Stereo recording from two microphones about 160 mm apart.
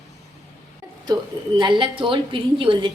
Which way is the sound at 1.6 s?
30° right (ahead or behind).